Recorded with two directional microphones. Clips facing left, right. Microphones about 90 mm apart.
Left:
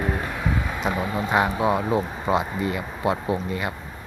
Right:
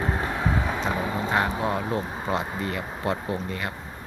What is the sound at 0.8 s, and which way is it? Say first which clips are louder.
Speech: left 2 dB; 15° left (ahead or behind).